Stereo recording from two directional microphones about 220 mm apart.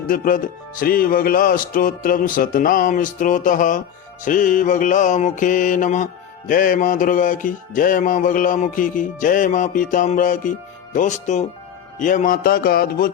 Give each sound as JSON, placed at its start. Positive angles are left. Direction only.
{"t": 0.1, "sound": "speech", "side_deg": 40}